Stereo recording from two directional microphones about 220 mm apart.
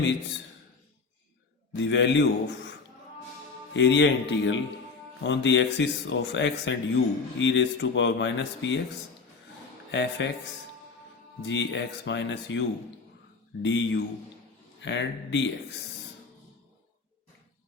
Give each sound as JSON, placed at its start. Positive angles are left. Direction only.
{"t": 1.7, "sound": "speech", "side_deg": 55}
{"t": 3.8, "sound": "speech", "side_deg": 55}
{"t": 9.9, "sound": "speech", "side_deg": 55}
{"t": 11.4, "sound": "speech", "side_deg": 55}